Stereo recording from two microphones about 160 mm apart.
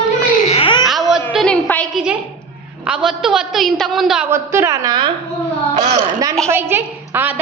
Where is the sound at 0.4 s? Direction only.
35° left (ahead or behind).